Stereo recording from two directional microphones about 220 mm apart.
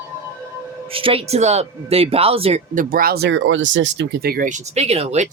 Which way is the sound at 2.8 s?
40° right (ahead or behind).